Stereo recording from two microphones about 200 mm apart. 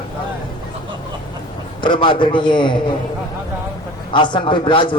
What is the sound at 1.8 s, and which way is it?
Speech, 25° left (ahead or behind).